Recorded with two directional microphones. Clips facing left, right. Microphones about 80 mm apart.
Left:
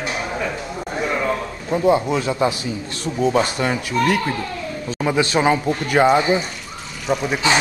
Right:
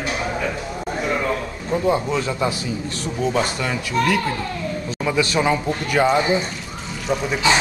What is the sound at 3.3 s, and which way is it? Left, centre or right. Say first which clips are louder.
A man's voice: left 3 dB; left.